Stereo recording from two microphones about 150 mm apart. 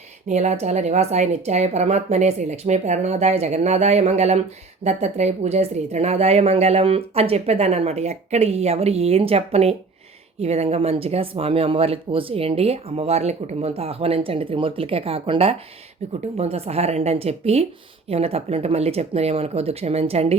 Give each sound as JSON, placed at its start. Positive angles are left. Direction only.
{"t": 0.3, "sound": "a woman's voice", "side_deg": -45}